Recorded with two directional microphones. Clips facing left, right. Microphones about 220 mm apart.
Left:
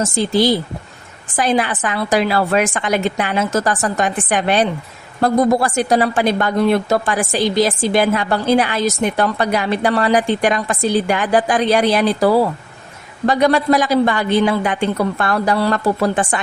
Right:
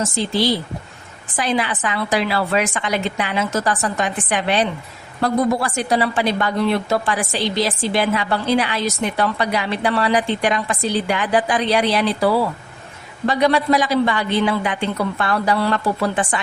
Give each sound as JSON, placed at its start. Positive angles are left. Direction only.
{"t": 0.0, "sound": "a woman's voice", "side_deg": 45}